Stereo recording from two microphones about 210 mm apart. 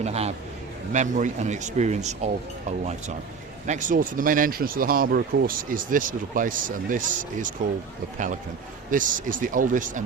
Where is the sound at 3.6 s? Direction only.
35° right (ahead or behind).